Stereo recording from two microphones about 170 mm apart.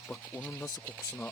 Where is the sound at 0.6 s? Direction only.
20° left (ahead or behind).